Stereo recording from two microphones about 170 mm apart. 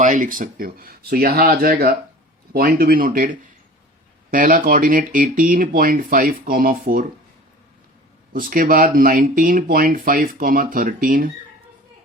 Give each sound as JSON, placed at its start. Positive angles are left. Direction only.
{"t": 0.0, "sound": "speech", "side_deg": -50}
{"t": 8.3, "sound": "speech", "side_deg": -55}